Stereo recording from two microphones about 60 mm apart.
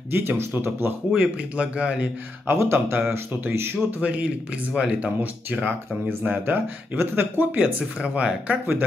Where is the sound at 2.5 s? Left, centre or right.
Right.